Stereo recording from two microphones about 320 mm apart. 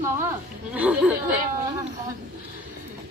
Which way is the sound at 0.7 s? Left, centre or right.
Centre.